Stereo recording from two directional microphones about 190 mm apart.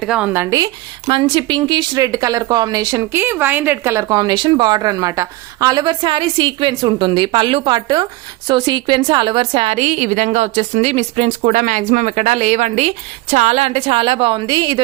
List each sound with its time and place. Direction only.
0.0 s speech: 5° right (ahead or behind)
0.5 s a woman's voice: 20° right (ahead or behind)